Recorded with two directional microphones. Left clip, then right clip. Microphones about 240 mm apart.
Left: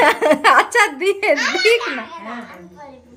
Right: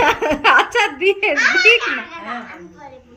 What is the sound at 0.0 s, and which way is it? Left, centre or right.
A child's voice, centre.